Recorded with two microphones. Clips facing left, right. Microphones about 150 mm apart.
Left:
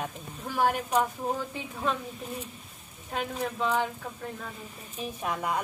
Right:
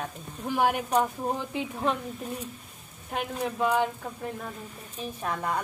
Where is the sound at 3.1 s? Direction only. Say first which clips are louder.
Right 1 dB; 10° right (ahead or behind).